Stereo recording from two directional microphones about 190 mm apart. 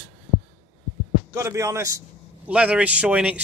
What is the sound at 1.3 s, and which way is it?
Speech, 15° right (ahead or behind).